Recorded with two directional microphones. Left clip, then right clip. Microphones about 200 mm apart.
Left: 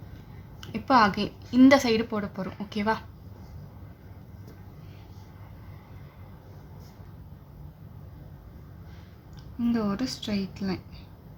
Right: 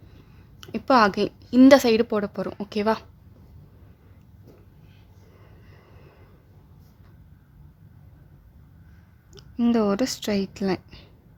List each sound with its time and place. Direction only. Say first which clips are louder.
0.6 s a woman's voice: right 3 dB; 45° right (ahead or behind)
9.3 s speech: right 6 dB; 60° right (ahead or behind)